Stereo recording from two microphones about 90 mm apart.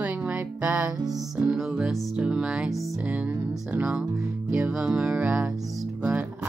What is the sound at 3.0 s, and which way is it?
Music, 15° right (ahead or behind).